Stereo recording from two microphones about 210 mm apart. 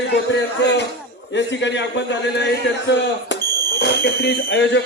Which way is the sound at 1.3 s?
60° left (ahead or behind).